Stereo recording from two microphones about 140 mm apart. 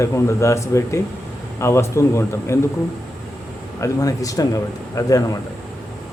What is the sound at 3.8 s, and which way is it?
A man's voice, 25° left (ahead or behind).